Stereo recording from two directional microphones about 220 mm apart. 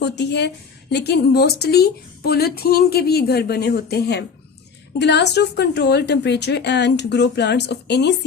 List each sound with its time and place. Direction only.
0.0 s a woman's voice: 50° left (ahead or behind)